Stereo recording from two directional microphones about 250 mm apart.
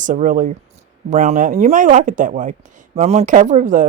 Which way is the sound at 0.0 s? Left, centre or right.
Right.